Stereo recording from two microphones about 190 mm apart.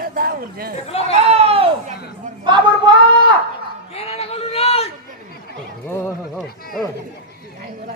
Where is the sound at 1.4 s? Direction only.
30° right (ahead or behind).